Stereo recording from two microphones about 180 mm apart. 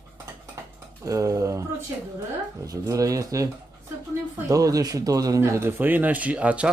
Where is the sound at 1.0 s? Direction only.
20° right (ahead or behind).